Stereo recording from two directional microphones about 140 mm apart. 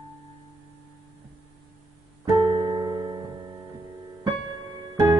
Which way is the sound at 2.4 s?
35° right (ahead or behind).